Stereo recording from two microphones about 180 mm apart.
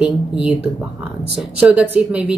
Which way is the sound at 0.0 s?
5° right (ahead or behind).